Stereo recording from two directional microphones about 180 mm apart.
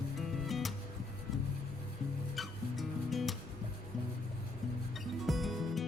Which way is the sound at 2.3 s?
Centre (ahead or behind).